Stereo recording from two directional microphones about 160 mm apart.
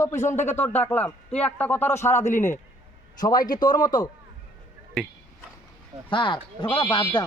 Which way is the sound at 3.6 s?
25° left (ahead or behind).